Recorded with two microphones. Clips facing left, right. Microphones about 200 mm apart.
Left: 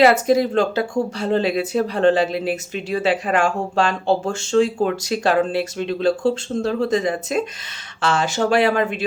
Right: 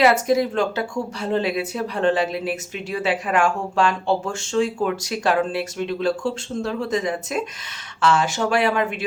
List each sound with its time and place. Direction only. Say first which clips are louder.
0.0 s speech: left 3 dB; 30° left (ahead or behind)